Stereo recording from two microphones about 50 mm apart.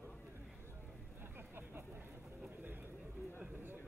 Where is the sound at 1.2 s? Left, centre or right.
Right.